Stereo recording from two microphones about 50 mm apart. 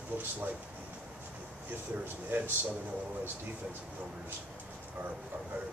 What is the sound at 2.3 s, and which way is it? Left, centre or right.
Speech, right.